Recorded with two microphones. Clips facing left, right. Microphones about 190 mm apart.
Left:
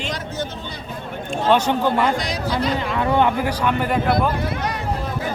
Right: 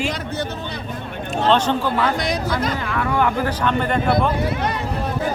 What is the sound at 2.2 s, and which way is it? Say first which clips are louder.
Speech: right 1 dB; 55° right (ahead or behind).